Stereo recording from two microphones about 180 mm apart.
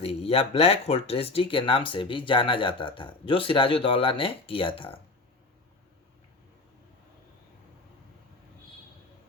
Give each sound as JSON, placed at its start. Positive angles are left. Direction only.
{"t": 0.0, "sound": "speech", "side_deg": 30}